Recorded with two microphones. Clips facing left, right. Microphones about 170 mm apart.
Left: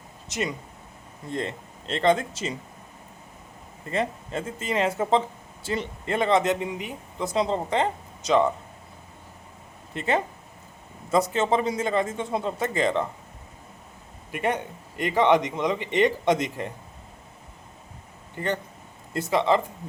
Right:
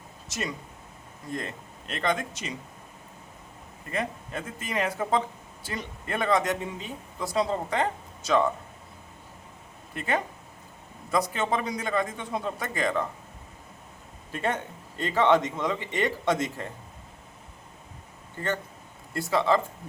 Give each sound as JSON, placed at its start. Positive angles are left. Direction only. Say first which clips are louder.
{"t": 0.3, "sound": "speech", "louder": "left 4 dB", "side_deg": 20}
{"t": 3.9, "sound": "speech", "louder": "left 4 dB", "side_deg": 25}
{"t": 9.9, "sound": "speech", "louder": "left 4 dB", "side_deg": 25}
{"t": 14.3, "sound": "a man's voice", "louder": "left 3 dB", "side_deg": 15}
{"t": 18.3, "sound": "a man's voice", "louder": "left 2 dB", "side_deg": 15}